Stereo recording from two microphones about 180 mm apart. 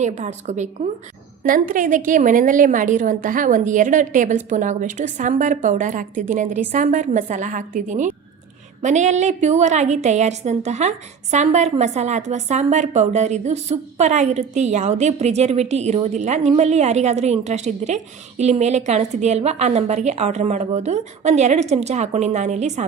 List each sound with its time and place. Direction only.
0.0 s a woman's voice: 40° right (ahead or behind)